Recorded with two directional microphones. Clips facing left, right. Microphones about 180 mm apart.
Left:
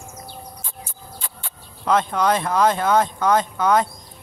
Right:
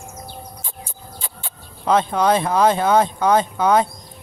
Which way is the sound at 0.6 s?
25° right (ahead or behind).